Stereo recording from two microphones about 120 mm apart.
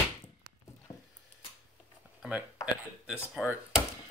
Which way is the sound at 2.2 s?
10° right (ahead or behind).